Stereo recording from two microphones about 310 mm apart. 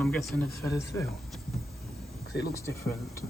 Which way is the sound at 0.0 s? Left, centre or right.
Centre.